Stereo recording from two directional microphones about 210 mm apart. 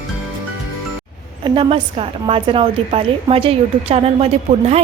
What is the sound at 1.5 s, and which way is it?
A woman's voice, 25° right (ahead or behind).